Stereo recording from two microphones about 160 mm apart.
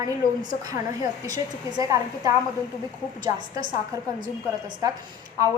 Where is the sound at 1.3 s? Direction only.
20° right (ahead or behind).